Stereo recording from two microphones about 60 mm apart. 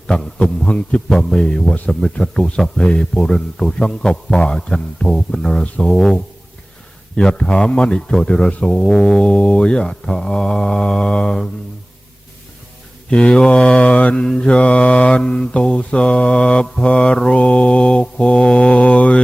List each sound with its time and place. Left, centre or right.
0.3 s mantra: centre
1.1 s speech: centre
13.1 s speech: centre
14.3 s mantra: centre